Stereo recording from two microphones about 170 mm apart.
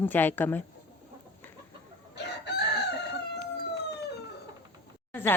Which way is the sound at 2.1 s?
90° left.